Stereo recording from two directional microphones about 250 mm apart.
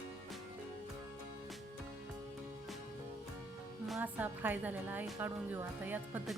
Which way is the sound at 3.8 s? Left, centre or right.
Centre.